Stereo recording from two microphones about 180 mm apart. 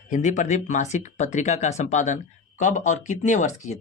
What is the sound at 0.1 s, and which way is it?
Speech, 40° left (ahead or behind).